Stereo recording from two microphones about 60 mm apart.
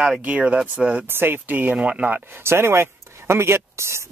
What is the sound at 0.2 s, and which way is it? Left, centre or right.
Speech, right.